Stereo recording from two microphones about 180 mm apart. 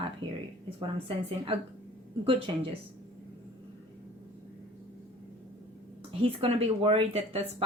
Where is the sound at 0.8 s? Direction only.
30° right (ahead or behind).